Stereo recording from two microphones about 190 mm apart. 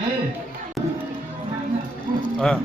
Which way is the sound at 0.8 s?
Centre (ahead or behind).